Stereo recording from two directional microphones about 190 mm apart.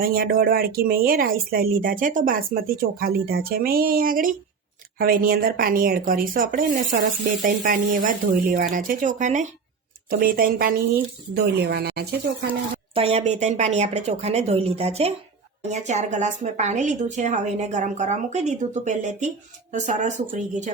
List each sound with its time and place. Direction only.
0.0 s speech: 50° right (ahead or behind)
10.1 s speech: 50° right (ahead or behind)
12.9 s a woman's voice: 30° right (ahead or behind)